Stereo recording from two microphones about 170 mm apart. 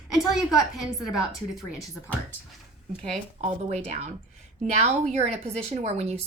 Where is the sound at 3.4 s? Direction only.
40° right (ahead or behind).